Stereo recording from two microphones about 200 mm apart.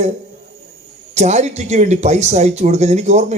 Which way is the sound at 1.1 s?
35° right (ahead or behind).